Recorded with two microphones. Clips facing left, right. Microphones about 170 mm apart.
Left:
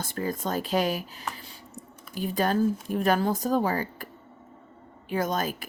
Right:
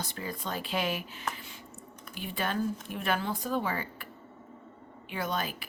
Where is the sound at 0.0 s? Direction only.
45° left (ahead or behind).